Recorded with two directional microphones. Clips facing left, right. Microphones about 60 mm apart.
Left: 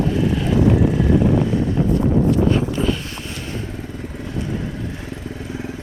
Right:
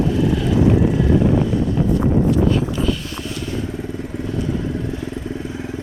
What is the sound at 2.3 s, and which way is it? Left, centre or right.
Vehicle, left.